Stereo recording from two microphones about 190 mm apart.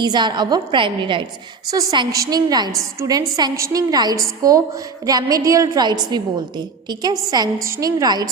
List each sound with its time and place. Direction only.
0.0 s a woman's voice: 25° right (ahead or behind)